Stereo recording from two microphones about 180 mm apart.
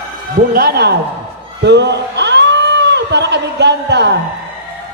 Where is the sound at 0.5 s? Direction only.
60° right (ahead or behind).